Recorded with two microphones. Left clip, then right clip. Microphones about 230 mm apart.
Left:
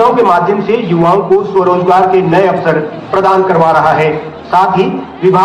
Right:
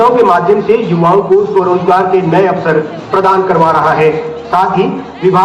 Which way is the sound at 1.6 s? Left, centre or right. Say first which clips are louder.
Left 1 dB; left.